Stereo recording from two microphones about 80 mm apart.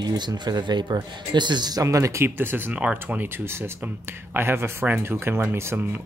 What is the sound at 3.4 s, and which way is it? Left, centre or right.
Speech, right.